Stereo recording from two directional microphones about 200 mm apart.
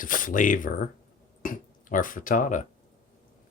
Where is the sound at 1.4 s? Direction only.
40° left (ahead or behind).